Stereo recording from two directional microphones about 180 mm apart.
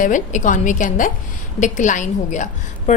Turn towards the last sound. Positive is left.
turn(degrees=40)  # may be behind; listen again after turning